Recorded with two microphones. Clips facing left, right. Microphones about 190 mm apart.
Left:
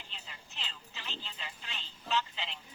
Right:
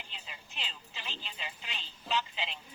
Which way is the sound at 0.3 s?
15° right (ahead or behind).